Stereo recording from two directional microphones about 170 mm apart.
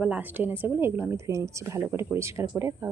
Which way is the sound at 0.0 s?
10° right (ahead or behind).